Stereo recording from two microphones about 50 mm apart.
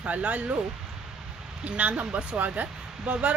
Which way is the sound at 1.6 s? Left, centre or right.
Right.